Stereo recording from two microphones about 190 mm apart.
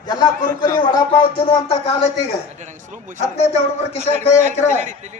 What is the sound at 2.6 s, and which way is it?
Speech, 40° right (ahead or behind).